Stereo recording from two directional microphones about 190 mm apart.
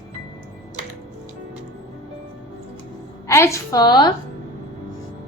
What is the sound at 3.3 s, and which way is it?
Speech, 15° left (ahead or behind).